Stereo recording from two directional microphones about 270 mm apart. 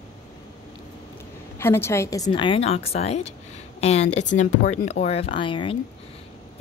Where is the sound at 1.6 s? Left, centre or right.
Centre.